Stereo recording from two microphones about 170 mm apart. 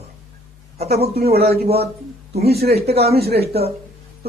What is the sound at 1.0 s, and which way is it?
Speech, 65° right (ahead or behind).